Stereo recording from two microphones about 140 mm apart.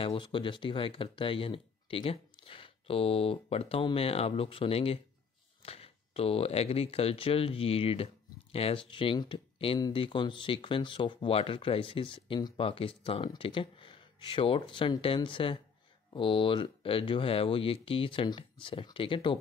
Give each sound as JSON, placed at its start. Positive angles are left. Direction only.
{"t": 0.0, "sound": "speech", "side_deg": 40}